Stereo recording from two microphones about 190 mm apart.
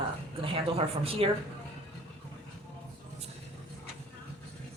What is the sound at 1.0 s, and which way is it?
Speech, 30° right (ahead or behind).